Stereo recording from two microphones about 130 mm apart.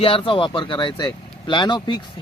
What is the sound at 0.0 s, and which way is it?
Speech, 45° left (ahead or behind).